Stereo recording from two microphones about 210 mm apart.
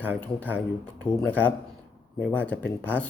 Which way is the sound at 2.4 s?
5° left (ahead or behind).